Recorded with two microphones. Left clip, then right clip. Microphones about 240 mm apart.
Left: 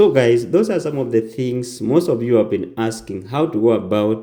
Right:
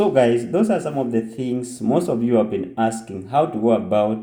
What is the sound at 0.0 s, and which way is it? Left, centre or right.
Speech, left.